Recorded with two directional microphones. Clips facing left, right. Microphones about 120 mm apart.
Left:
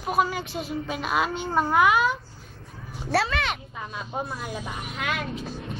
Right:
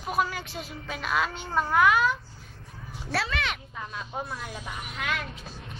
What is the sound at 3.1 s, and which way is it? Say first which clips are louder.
Speech: left 5 dB; 40° left (ahead or behind).